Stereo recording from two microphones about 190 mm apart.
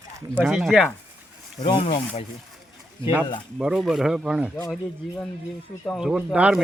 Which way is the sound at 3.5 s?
5° right (ahead or behind).